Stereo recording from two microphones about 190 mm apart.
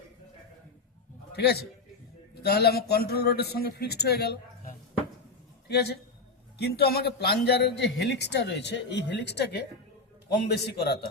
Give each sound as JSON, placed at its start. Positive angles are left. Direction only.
{"t": 1.3, "sound": "a man's voice", "side_deg": 60}
{"t": 5.6, "sound": "speech", "side_deg": 60}